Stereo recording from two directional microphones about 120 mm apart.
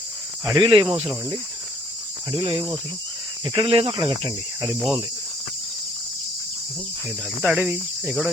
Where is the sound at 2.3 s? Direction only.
40° right (ahead or behind).